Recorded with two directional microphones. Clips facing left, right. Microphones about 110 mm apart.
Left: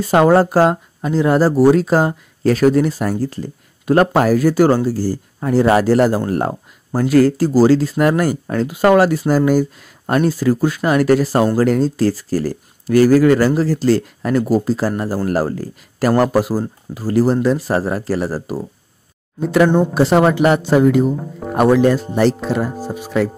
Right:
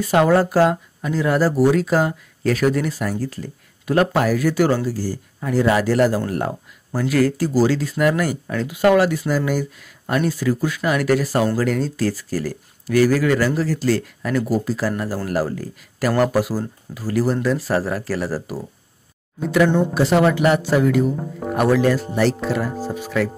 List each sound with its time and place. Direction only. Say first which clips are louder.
0.0 s speech: left 4 dB; 30° left (ahead or behind)
3.9 s speech: left 5 dB; 40° left (ahead or behind)
19.5 s speech: left 3 dB; 40° left (ahead or behind)
21.2 s speech: even; centre (ahead or behind)
21.5 s speech: left 4 dB; 25° left (ahead or behind)